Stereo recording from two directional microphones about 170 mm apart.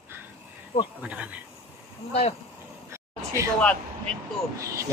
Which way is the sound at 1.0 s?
10° right (ahead or behind).